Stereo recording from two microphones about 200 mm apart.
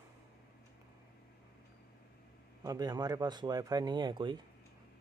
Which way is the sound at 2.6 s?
20° right (ahead or behind).